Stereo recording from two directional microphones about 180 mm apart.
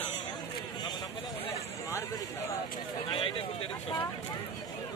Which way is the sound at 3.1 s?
30° left (ahead or behind).